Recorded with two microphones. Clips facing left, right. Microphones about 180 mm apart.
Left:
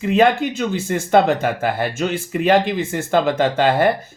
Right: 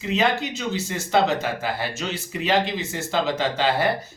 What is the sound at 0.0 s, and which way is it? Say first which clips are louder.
Speech: left 7 dB; 55° left (ahead or behind).